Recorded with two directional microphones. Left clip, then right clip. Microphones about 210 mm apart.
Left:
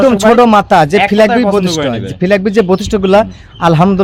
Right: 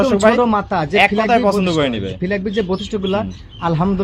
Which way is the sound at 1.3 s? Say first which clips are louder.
Left 3 dB; 5° right (ahead or behind).